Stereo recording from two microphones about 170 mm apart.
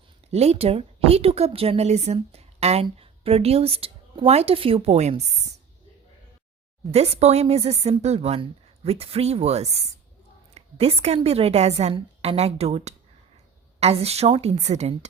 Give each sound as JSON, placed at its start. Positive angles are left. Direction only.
{"t": 0.3, "sound": "speech", "side_deg": -40}
{"t": 6.9, "sound": "speech", "side_deg": -40}